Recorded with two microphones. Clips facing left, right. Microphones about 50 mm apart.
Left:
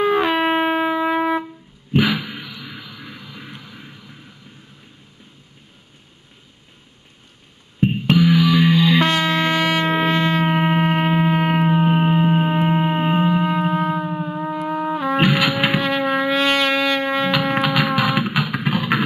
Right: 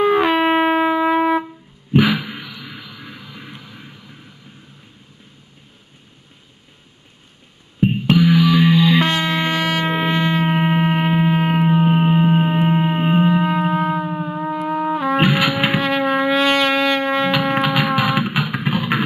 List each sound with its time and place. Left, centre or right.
0.0 s shofar: centre
2.0 s a sound: centre
7.8 s music: centre
9.0 s music: centre
9.6 s shofar: centre
10.0 s shofar: centre
10.3 s a sound: centre